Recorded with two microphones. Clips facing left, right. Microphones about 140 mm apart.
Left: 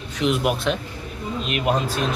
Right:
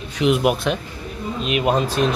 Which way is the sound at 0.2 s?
5° right (ahead or behind).